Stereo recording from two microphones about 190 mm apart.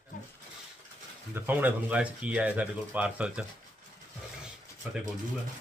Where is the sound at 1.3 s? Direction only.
10° right (ahead or behind).